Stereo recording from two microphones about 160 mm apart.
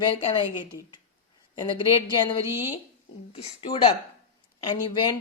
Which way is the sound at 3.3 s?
35° left (ahead or behind).